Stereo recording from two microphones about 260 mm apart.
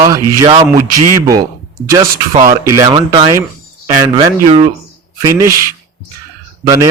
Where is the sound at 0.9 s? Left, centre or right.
Right.